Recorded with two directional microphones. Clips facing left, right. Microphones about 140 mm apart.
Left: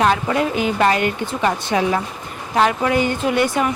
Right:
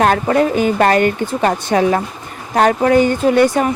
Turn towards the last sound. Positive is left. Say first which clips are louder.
# right 6 dB
turn(degrees=-40)  # may be behind; listen again after turning